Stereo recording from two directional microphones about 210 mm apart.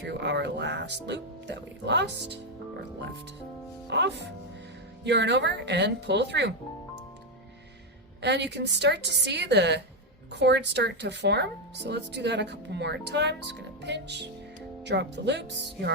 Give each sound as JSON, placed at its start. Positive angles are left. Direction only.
{"t": 0.1, "sound": "speech", "side_deg": -55}
{"t": 3.8, "sound": "speech", "side_deg": -55}
{"t": 8.2, "sound": "speech", "side_deg": -55}